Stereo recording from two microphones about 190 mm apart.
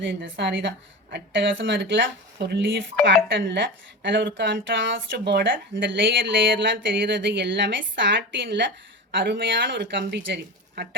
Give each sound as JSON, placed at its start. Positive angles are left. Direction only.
{"t": 0.0, "sound": "speech", "side_deg": -70}